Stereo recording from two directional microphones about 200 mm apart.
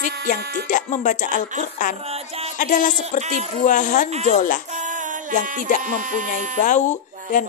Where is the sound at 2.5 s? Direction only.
40° left (ahead or behind).